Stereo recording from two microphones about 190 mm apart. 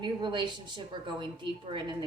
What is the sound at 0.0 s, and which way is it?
Speech, 25° right (ahead or behind).